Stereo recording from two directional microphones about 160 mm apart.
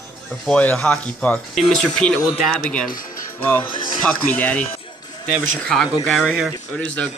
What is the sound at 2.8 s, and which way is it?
Speech, 60° left (ahead or behind).